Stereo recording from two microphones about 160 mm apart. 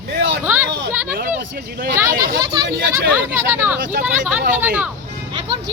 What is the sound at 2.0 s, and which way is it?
Speech, 65° right (ahead or behind).